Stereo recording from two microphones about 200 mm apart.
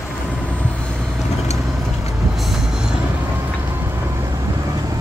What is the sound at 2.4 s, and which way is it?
Vehicle, centre (ahead or behind).